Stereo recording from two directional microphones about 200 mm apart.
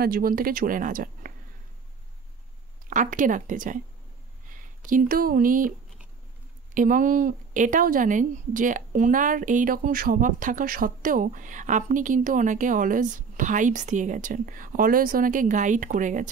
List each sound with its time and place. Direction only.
0.0 s speech: 45° right (ahead or behind)
2.9 s speech: 40° right (ahead or behind)
6.7 s speech: 40° right (ahead or behind)